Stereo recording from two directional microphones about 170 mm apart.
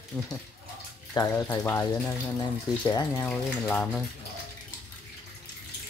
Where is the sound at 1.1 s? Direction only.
20° left (ahead or behind).